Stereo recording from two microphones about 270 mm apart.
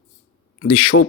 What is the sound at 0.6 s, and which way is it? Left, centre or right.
Speech, left.